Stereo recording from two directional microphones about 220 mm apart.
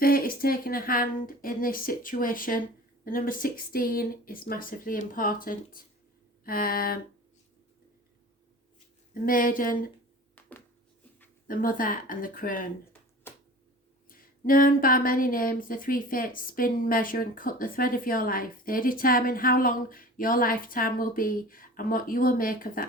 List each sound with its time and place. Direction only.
0.0 s speech: 40° left (ahead or behind)
9.2 s speech: 40° left (ahead or behind)
11.4 s speech: 40° left (ahead or behind)
13.3 s a sound: 10° left (ahead or behind)
14.1 s speech: 40° left (ahead or behind)